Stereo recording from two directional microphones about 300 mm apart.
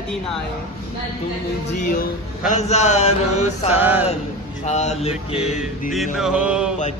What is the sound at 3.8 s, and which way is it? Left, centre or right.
Speech, centre.